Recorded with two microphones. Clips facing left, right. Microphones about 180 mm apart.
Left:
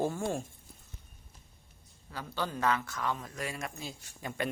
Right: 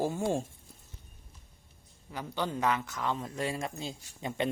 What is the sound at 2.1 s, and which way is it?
Speech, 20° right (ahead or behind).